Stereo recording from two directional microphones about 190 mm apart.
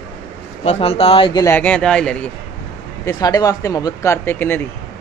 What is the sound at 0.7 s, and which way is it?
Speech, 30° left (ahead or behind).